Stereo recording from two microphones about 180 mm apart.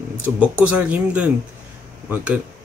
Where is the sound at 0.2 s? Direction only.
10° right (ahead or behind).